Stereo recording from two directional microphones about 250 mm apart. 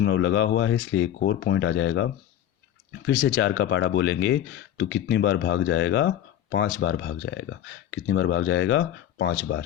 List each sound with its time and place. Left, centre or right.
0.0 s speech: left